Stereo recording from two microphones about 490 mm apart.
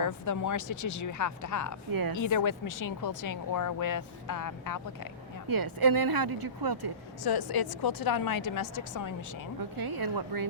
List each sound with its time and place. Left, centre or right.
0.0 s speech: left
1.9 s speech: right
2.1 s speech: left
5.5 s speech: right
7.3 s a woman's voice: left
9.6 s speech: right